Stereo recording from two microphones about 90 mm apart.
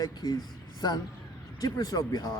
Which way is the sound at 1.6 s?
45° left (ahead or behind).